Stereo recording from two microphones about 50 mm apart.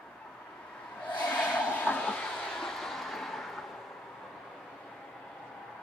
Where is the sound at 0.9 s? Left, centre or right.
Left.